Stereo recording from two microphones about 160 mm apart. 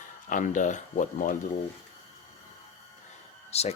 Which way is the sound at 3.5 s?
40° left (ahead or behind).